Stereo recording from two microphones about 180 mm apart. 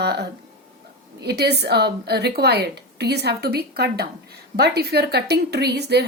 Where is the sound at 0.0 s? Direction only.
65° right (ahead or behind).